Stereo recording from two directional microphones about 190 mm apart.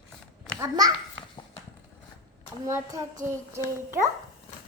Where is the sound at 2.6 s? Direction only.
15° right (ahead or behind).